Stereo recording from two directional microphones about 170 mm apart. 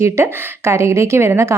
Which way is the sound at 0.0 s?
15° right (ahead or behind).